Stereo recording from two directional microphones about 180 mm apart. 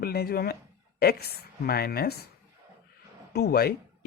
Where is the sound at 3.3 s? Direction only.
60° left (ahead or behind).